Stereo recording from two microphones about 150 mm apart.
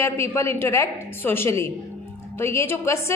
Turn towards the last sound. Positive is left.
turn(degrees=15)  # may be behind; listen again after turning